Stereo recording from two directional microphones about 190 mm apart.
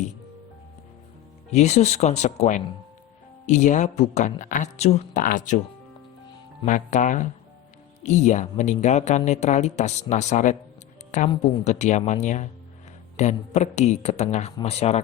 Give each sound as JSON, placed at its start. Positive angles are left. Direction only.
{"t": 1.5, "sound": "speech", "side_deg": 35}
{"t": 6.7, "sound": "speech", "side_deg": 40}